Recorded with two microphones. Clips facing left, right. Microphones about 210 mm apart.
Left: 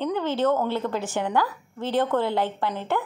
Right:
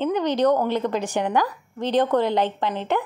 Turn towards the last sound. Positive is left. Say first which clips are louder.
# right 2 dB
turn(degrees=-20)  # may be behind; listen again after turning